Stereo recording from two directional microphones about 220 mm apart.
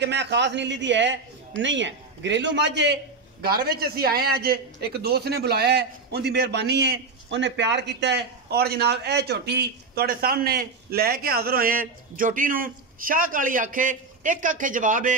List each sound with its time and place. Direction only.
0.0 s a man's voice: 50° right (ahead or behind)